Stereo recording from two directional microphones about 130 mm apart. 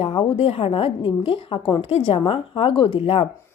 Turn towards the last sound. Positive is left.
turn(degrees=45)  # may be behind; listen again after turning